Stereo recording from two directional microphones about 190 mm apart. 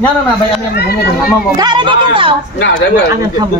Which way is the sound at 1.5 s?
25° right (ahead or behind).